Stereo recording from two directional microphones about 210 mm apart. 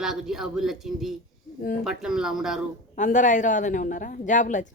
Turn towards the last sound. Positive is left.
turn(degrees=35)  # may be behind; listen again after turning